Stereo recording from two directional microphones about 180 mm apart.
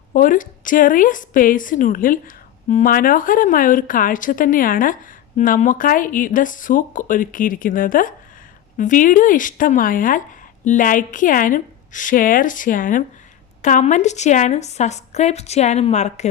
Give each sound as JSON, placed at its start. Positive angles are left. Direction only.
{"t": 0.1, "sound": "a woman's voice", "side_deg": 50}